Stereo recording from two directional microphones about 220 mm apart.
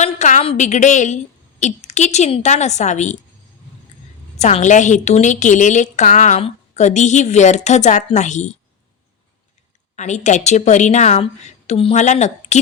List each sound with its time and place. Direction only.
0.0 s a woman's voice: 35° left (ahead or behind)
4.4 s a woman's voice: 30° left (ahead or behind)
9.9 s a woman's voice: 30° left (ahead or behind)